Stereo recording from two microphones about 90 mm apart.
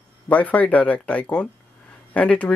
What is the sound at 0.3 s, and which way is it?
Speech, 15° left (ahead or behind).